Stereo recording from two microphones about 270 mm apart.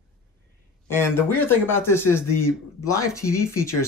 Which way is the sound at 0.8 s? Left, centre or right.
Centre.